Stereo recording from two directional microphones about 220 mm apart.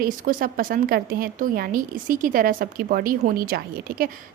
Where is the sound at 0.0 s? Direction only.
40° right (ahead or behind).